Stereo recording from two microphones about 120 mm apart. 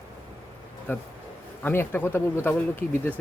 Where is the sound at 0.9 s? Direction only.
15° left (ahead or behind).